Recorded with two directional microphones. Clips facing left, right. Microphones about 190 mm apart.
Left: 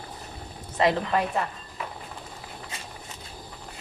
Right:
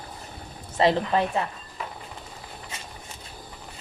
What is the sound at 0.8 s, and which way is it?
Speech, 30° right (ahead or behind).